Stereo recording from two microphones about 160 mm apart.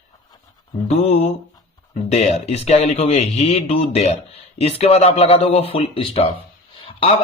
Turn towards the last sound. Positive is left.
turn(degrees=35)  # may be behind; listen again after turning